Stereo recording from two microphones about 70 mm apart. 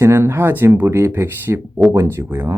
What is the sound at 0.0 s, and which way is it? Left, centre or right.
Speech, right.